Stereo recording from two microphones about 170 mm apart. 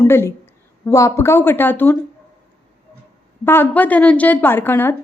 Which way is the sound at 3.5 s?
10° left (ahead or behind).